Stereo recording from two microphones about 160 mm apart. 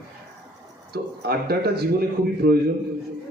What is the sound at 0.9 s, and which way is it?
Speech, 80° right.